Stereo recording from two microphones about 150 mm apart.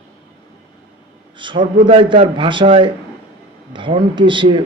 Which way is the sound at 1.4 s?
30° right (ahead or behind).